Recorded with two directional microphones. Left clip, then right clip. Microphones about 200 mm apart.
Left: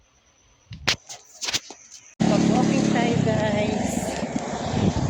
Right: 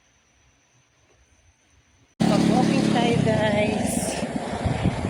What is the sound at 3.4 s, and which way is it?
Vehicle, 15° right (ahead or behind).